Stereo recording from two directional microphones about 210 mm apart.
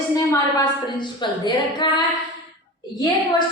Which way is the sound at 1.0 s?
20° left (ahead or behind).